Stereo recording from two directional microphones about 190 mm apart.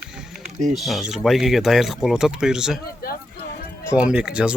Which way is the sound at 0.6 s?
Centre (ahead or behind).